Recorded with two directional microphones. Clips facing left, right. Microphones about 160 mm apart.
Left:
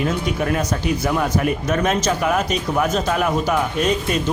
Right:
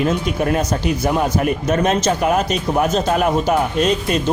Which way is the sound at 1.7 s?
30° right (ahead or behind).